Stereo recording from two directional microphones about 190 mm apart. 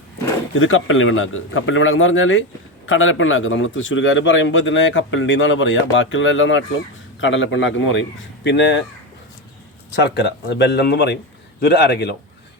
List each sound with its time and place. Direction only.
0.5 s a man's voice: 90° left
8.4 s speech: 70° left (ahead or behind)
9.9 s speech: 65° left (ahead or behind)